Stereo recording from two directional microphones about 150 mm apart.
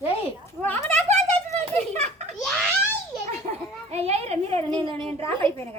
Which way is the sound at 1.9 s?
45° right (ahead or behind).